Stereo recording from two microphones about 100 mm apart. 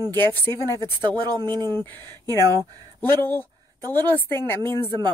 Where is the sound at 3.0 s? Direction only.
20° left (ahead or behind).